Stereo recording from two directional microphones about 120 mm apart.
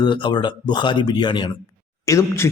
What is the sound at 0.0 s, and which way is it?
Speech, 40° left (ahead or behind).